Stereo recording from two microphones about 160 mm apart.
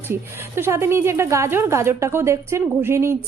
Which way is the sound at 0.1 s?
15° right (ahead or behind).